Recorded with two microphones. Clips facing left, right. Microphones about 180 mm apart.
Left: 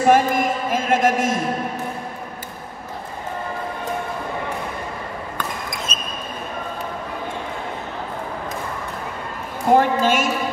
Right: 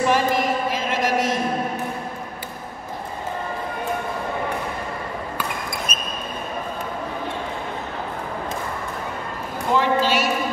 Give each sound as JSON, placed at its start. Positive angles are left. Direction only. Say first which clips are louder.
{"t": 0.0, "sound": "speech", "louder": "left 4 dB", "side_deg": 50}
{"t": 5.9, "sound": "basketball bounce", "louder": "even", "side_deg": 30}
{"t": 9.7, "sound": "a sound", "louder": "left 4 dB", "side_deg": 50}